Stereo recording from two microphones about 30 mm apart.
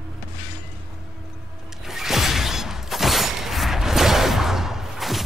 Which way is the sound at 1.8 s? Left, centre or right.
Centre.